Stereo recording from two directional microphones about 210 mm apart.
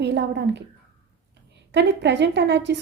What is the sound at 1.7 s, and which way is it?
A woman's voice, 55° right (ahead or behind).